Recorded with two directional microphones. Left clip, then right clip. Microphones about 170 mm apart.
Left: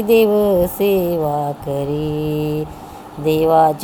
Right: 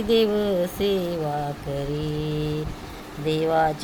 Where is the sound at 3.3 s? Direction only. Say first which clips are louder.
Left 9 dB; 20° left (ahead or behind).